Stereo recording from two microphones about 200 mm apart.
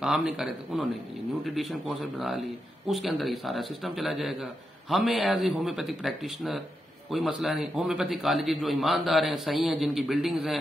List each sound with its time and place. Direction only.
0.0 s a man's voice: 5° right (ahead or behind)